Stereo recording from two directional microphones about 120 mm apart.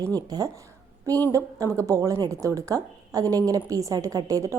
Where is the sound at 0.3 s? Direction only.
35° right (ahead or behind).